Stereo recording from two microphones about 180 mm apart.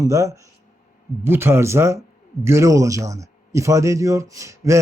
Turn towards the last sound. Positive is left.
turn(degrees=-15)  # may be behind; listen again after turning